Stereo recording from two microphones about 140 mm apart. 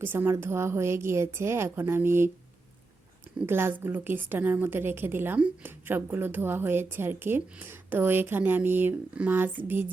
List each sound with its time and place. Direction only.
0.0 s a woman's voice: 15° right (ahead or behind)
3.4 s a woman's voice: 15° right (ahead or behind)